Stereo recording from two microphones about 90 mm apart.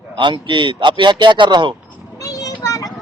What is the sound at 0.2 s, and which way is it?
A man's voice, 65° right (ahead or behind).